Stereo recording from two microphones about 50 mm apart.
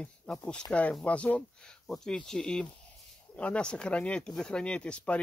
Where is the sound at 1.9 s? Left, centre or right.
Centre.